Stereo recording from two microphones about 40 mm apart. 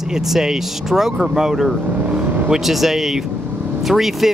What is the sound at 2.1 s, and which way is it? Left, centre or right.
Vehicle, right.